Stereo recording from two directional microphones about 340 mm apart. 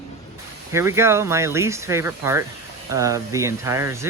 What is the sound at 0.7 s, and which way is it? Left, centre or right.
Speech, centre.